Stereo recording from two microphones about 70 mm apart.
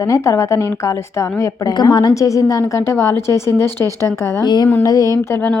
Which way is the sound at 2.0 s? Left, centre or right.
Left.